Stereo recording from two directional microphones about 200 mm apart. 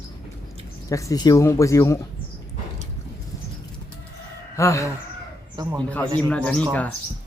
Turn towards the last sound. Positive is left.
turn(degrees=5)  # may be behind; listen again after turning